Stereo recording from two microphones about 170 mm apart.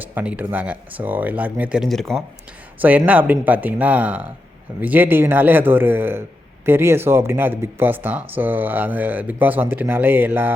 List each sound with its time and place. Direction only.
0.0 s speech: 10° right (ahead or behind)
2.7 s speech: 10° right (ahead or behind)